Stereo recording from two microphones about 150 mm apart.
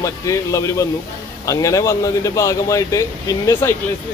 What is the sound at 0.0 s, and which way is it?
Speech, 20° left (ahead or behind).